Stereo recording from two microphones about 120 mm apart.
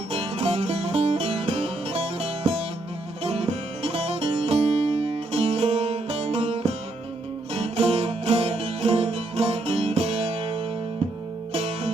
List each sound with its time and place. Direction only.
0.1 s music: 55° right (ahead or behind)